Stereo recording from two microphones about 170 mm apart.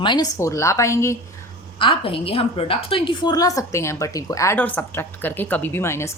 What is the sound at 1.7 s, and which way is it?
A woman's voice, 30° left (ahead or behind).